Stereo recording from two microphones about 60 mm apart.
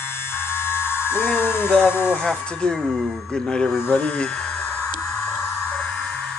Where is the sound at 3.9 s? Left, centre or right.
Left.